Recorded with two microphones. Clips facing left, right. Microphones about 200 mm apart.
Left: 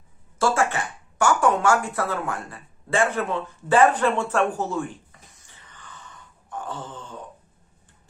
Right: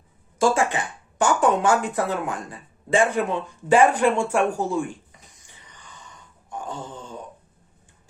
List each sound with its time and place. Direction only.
0.3 s speech: 15° right (ahead or behind)
5.5 s groan: 15° right (ahead or behind)